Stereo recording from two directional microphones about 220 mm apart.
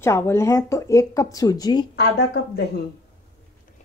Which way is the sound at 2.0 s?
50° left (ahead or behind).